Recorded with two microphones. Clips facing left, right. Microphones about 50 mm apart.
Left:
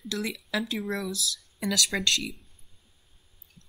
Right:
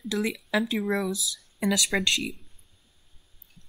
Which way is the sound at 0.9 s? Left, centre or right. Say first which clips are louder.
Right 4 dB; centre.